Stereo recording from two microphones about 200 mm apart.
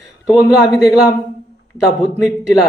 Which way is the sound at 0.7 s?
15° left (ahead or behind).